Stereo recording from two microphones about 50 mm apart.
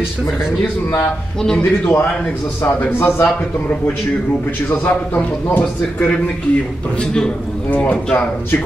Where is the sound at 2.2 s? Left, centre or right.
Left.